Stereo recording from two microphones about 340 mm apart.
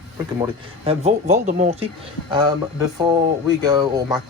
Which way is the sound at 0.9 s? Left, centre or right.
Centre.